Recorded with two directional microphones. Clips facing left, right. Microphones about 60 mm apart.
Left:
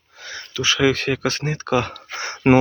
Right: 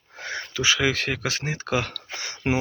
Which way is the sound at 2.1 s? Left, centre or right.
Left.